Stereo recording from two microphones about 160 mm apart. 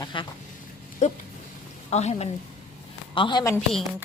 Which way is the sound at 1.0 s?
50° left (ahead or behind).